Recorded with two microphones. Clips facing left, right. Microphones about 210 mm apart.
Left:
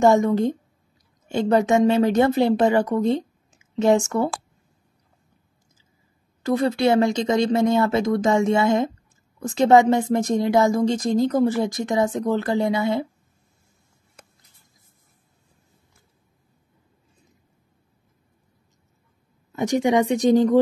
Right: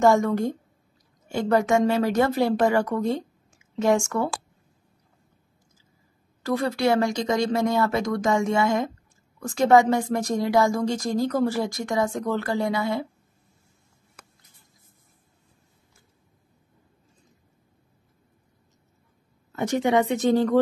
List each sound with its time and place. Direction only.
0.0 s speech: 20° left (ahead or behind)
6.4 s speech: 20° left (ahead or behind)
19.5 s speech: 15° left (ahead or behind)